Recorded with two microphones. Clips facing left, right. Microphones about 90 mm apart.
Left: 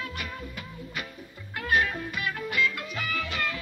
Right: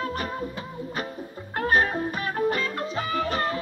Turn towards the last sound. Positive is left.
turn(degrees=-35)  # may be behind; listen again after turning